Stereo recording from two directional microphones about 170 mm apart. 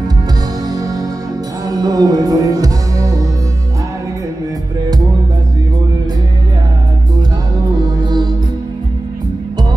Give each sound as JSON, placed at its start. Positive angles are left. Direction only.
{"t": 0.7, "sound": "music", "side_deg": -20}
{"t": 7.8, "sound": "music", "side_deg": -25}